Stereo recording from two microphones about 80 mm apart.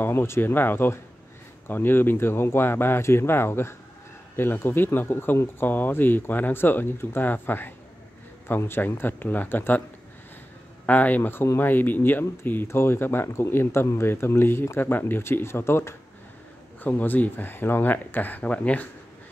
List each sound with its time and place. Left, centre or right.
0.0 s speech: left
10.9 s speech: centre